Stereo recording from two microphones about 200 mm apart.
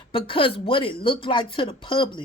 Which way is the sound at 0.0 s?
25° left (ahead or behind).